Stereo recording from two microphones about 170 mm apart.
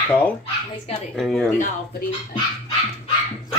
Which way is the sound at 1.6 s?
60° left (ahead or behind).